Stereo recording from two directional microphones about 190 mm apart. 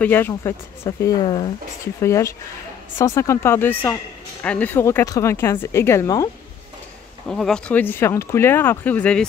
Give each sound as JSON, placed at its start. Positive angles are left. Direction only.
{"t": 0.0, "sound": "speech", "side_deg": 10}
{"t": 7.2, "sound": "speech", "side_deg": 5}